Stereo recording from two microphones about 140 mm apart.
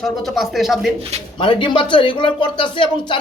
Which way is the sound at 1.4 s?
35° left (ahead or behind).